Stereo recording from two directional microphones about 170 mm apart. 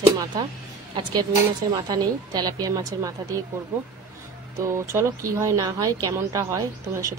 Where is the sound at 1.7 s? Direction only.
25° right (ahead or behind).